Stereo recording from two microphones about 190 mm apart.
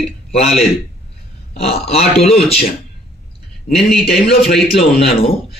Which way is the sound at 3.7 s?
30° left (ahead or behind).